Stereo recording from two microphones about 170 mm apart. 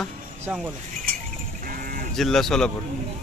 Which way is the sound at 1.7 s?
55° right (ahead or behind).